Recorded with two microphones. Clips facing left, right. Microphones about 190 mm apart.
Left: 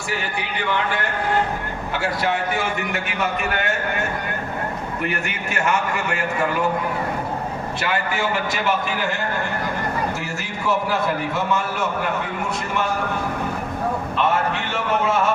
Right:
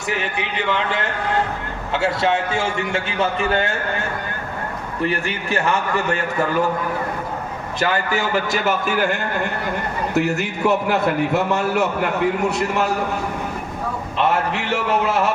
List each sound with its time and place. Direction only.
0.1 s a man's voice: 20° right (ahead or behind)
5.0 s a man's voice: 30° right (ahead or behind)
7.8 s a man's voice: 40° right (ahead or behind)
10.2 s a man's voice: 65° right (ahead or behind)